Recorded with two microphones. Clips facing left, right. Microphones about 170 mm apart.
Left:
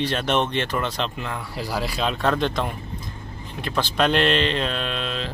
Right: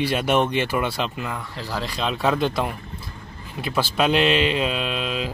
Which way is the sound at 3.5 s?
5° right (ahead or behind).